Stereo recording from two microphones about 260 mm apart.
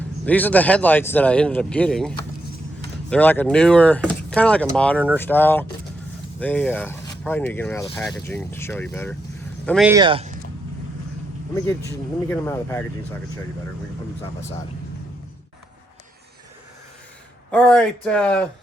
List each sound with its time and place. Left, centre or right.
0.3 s speech: centre
9.9 s speech: centre
12.3 s speech: centre
17.5 s speech: centre